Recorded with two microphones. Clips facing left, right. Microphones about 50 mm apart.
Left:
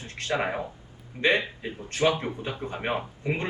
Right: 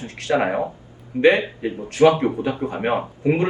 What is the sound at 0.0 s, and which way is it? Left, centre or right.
A man's voice, right.